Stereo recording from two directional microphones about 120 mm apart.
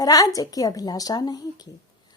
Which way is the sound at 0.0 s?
30° left (ahead or behind).